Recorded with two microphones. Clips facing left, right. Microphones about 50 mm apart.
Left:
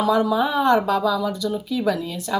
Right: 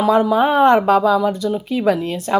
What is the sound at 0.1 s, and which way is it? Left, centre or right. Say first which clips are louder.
Speech: right 7 dB; right.